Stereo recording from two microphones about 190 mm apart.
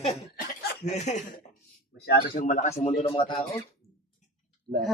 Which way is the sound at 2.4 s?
40° left (ahead or behind).